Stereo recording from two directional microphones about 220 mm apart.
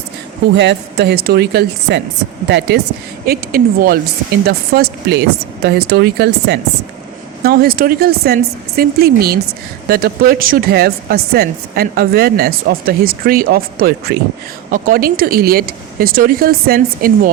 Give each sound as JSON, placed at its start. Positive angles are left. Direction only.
{"t": 0.5, "sound": "speech", "side_deg": -55}
{"t": 3.2, "sound": "speech", "side_deg": -40}